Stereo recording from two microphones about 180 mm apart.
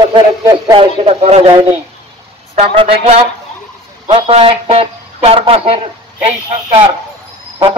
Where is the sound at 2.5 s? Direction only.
30° right (ahead or behind).